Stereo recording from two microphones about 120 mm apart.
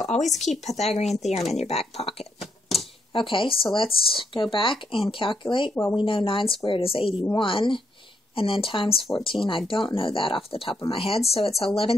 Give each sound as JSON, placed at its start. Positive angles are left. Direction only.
{"t": 0.4, "sound": "speech", "side_deg": 70}
{"t": 2.4, "sound": "typewriter", "side_deg": 0}
{"t": 3.1, "sound": "speech", "side_deg": 45}